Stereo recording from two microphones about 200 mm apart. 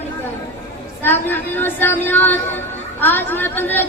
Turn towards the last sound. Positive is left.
turn(degrees=10)  # may be behind; listen again after turning